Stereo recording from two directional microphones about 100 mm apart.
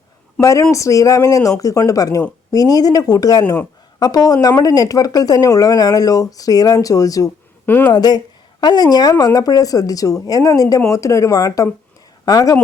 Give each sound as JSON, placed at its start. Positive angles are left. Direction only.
{"t": 0.3, "sound": "a woman's voice", "side_deg": 30}
{"t": 7.7, "sound": "speech", "side_deg": 20}
{"t": 7.9, "sound": "speech", "side_deg": 40}